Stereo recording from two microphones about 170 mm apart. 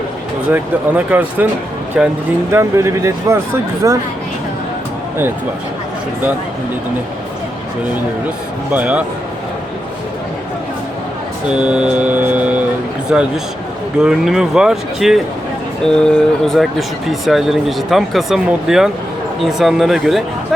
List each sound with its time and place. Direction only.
0.5 s mantra: 10° right (ahead or behind)
2.0 s speech: 5° right (ahead or behind)
2.5 s mantra: 15° right (ahead or behind)
3.8 s speech: 20° right (ahead or behind)
8.7 s mantra: 10° right (ahead or behind)
11.5 s mantra: 5° right (ahead or behind)
13.1 s speech: 5° right (ahead or behind)